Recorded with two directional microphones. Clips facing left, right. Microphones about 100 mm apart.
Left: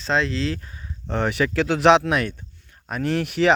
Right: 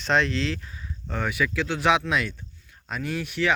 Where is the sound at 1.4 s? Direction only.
70° left (ahead or behind).